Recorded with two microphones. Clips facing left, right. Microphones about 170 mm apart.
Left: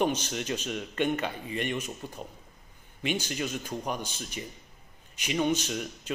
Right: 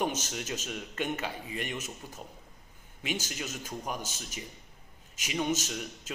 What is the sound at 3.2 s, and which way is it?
Speech, 5° right (ahead or behind).